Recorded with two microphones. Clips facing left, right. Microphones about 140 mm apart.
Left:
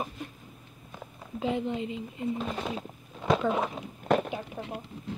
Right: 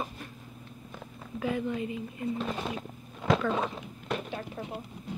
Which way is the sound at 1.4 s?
20° left (ahead or behind).